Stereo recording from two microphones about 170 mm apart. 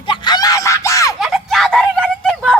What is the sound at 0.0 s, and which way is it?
Screaming, 30° left (ahead or behind).